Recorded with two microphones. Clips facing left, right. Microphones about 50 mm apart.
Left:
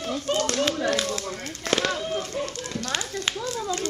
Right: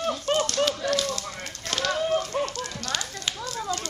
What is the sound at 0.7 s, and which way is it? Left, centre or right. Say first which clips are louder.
Speech: left 1 dB; centre.